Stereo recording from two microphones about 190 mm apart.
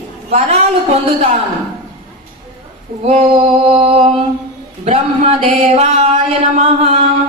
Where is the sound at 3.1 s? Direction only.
30° right (ahead or behind).